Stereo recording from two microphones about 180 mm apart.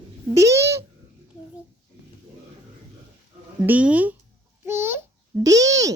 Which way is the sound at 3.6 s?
10° right (ahead or behind).